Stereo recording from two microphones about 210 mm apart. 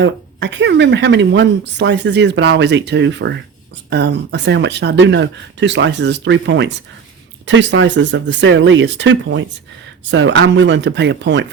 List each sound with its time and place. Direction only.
0.0 s speech: 55° right (ahead or behind)